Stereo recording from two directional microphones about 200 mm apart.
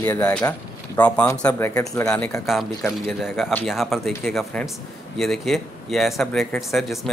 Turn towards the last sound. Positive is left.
turn(degrees=0)  # may be behind; listen again after turning